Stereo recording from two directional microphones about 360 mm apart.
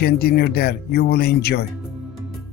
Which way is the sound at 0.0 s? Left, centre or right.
Left.